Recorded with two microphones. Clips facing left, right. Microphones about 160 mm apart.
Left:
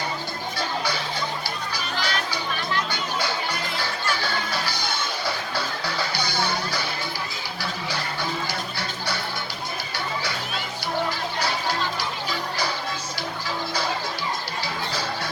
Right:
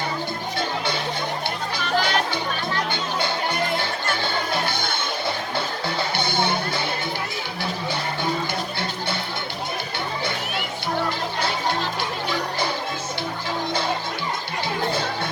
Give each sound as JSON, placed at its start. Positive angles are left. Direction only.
{"t": 2.0, "sound": "music", "side_deg": -50}
{"t": 4.2, "sound": "music", "side_deg": -25}
{"t": 6.1, "sound": "music", "side_deg": -25}